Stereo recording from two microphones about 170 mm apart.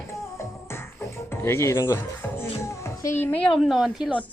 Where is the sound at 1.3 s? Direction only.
15° left (ahead or behind).